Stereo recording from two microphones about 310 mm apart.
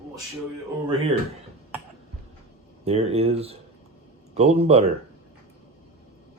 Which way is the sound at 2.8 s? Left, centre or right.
Centre.